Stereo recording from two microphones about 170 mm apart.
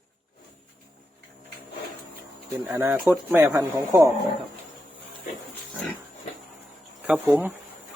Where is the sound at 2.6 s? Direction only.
15° right (ahead or behind).